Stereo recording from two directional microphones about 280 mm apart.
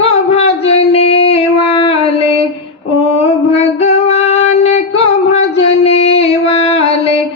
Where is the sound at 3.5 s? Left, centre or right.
Left.